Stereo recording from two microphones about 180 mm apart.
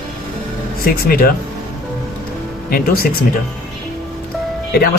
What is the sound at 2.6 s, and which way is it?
Speech, 55° left (ahead or behind).